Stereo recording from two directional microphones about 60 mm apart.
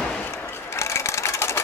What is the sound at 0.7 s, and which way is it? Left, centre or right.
Sewing machine, left.